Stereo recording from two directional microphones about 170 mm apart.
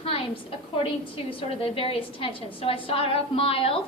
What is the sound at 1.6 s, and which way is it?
A woman's voice, 35° left (ahead or behind).